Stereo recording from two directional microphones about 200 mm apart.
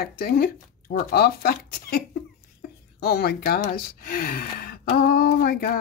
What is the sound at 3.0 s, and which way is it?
Speech, 50° left (ahead or behind).